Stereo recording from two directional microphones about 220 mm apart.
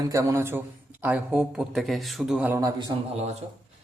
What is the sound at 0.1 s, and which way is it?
A man's voice, 15° right (ahead or behind).